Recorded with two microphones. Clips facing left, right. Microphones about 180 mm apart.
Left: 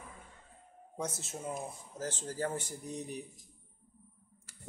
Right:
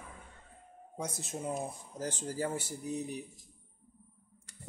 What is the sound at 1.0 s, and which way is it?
Speech, 15° right (ahead or behind).